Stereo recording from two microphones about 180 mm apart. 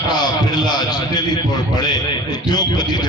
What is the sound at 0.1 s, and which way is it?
A man's voice, 25° left (ahead or behind).